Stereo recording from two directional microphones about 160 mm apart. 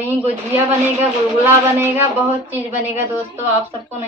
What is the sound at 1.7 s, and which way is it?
A woman's voice, 15° right (ahead or behind).